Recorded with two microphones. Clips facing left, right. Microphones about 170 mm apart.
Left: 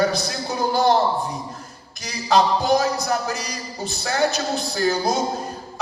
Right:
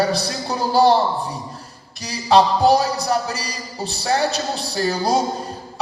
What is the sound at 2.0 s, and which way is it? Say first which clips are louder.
Speech: right 3 dB; 35° right (ahead or behind).